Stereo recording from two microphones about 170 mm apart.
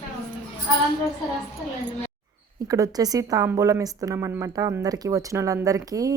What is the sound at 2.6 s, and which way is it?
A woman's voice, 20° right (ahead or behind).